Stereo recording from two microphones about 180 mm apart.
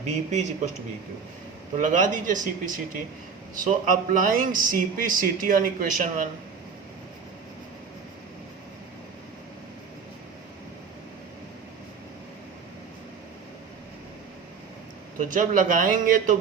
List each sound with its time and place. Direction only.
0.0 s speech: 40° right (ahead or behind)
1.8 s a man's voice: 45° right (ahead or behind)
15.3 s a man's voice: 45° right (ahead or behind)